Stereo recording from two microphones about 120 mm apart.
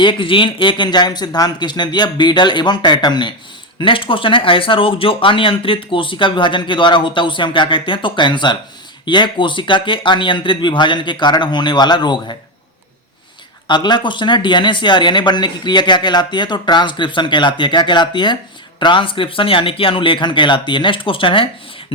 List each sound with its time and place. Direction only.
0.0 s speech: 45° left (ahead or behind)
13.7 s speech: 40° left (ahead or behind)